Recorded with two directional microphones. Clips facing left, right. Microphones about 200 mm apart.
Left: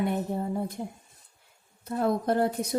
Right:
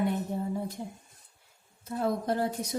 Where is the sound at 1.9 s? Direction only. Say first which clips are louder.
Left 3 dB; 55° left (ahead or behind).